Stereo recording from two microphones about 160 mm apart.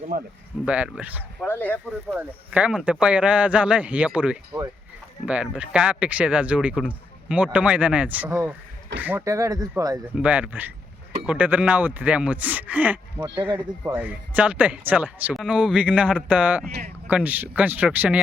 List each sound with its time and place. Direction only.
0.1 s speech: 60° right (ahead or behind)
0.6 s speech: 5° right (ahead or behind)
1.5 s speech: 10° left (ahead or behind)
2.1 s speech: 10° right (ahead or behind)
10.2 s speech: 10° right (ahead or behind)